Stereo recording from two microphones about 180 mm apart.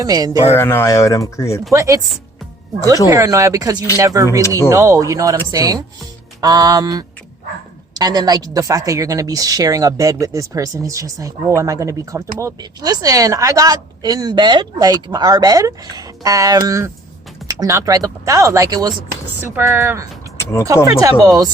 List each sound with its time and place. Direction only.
0.0 s speech: 20° right (ahead or behind)
0.5 s speech: 15° left (ahead or behind)
1.7 s speech: 15° right (ahead or behind)
3.1 s speech: 15° right (ahead or behind)
20.4 s speech: 15° left (ahead or behind)
20.8 s speech: 20° right (ahead or behind)